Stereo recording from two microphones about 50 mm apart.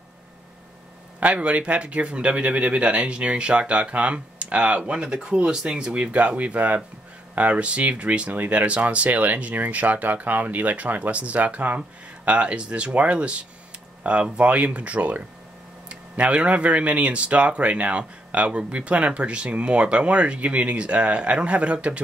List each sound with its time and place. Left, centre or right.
1.2 s speech: right
4.9 s speech: centre
5.9 s speech: right